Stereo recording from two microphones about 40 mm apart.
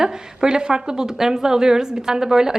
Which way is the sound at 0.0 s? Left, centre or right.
Centre.